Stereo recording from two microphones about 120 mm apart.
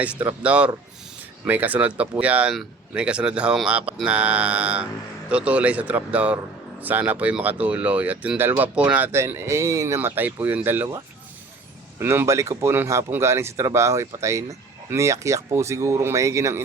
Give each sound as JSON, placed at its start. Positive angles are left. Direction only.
{"t": 0.0, "sound": "speech", "side_deg": -15}
{"t": 9.1, "sound": "speech", "side_deg": -25}